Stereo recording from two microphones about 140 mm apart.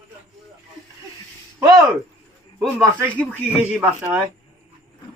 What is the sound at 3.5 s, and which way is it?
Speech, 10° right (ahead or behind).